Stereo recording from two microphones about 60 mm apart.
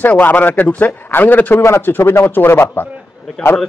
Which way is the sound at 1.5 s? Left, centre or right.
Left.